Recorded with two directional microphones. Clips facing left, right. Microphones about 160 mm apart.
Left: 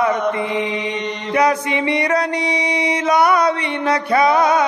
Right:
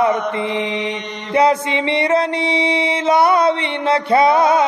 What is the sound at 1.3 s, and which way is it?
Mantra, 25° right (ahead or behind).